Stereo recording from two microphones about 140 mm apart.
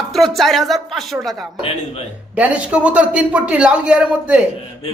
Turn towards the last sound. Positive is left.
turn(degrees=-10)  # may be behind; listen again after turning